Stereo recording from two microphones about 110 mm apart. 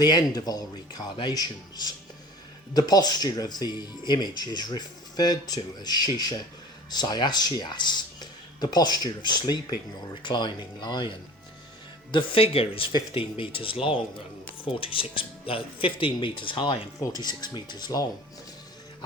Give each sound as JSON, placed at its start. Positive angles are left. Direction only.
{"t": 0.0, "sound": "speech", "side_deg": 40}
{"t": 12.1, "sound": "speech", "side_deg": 60}
{"t": 17.0, "sound": "speech", "side_deg": 35}